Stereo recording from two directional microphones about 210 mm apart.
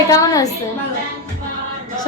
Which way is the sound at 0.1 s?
15° left (ahead or behind).